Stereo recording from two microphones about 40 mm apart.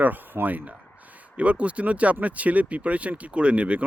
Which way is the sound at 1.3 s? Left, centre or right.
Right.